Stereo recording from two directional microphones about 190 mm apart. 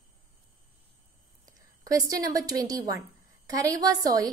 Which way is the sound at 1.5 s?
20° right (ahead or behind).